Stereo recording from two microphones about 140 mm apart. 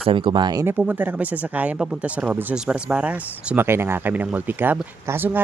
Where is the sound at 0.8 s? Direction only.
10° right (ahead or behind).